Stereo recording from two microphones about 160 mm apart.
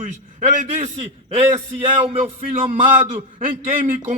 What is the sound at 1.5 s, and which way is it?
A man's voice, 35° right (ahead or behind).